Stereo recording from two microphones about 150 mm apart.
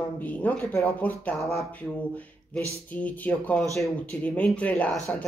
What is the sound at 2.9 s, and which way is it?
Speech, 10° left (ahead or behind).